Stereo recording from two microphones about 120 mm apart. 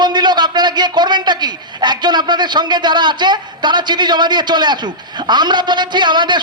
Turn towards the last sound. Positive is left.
turn(degrees=-40)  # may be behind; listen again after turning